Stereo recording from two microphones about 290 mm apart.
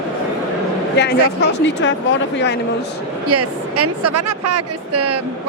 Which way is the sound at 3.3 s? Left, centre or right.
Right.